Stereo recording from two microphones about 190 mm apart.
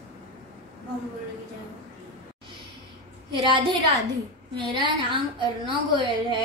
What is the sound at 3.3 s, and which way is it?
A woman's voice, 25° right (ahead or behind).